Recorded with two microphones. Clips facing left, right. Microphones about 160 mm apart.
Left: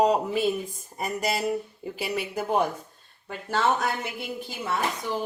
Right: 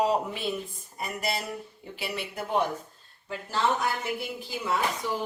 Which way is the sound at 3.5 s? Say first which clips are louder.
Left 2 dB; 65° left (ahead or behind).